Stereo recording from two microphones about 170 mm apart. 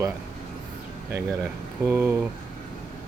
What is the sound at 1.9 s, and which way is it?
Speech, 10° right (ahead or behind).